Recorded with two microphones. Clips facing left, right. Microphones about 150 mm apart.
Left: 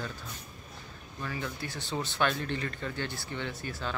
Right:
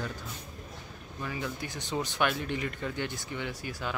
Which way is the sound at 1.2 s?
15° right (ahead or behind).